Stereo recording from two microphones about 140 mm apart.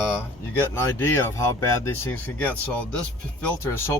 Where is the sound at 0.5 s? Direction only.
15° left (ahead or behind).